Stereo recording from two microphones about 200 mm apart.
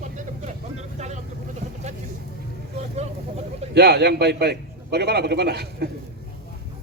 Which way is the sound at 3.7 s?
55° right (ahead or behind).